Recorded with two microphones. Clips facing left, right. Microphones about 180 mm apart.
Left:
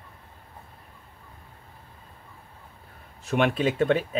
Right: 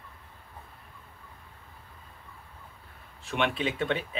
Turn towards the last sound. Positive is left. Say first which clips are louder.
# left 7 dB
turn(degrees=40)  # may be behind; listen again after turning